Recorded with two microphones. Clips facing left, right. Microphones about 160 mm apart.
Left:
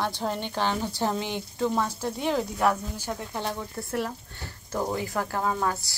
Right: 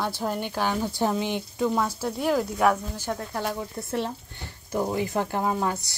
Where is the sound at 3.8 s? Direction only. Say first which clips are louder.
Right 1 dB; 25° right (ahead or behind).